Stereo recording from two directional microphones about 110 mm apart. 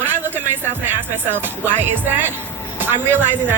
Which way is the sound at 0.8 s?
20° right (ahead or behind).